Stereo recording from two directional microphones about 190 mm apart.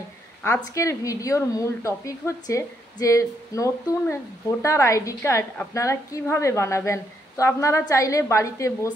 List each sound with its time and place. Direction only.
0.7 s a woman's voice: 15° left (ahead or behind)